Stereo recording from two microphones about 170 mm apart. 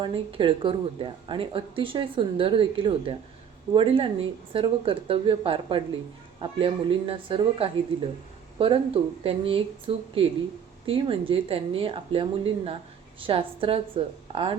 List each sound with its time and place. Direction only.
0.0 s speech: 30° right (ahead or behind)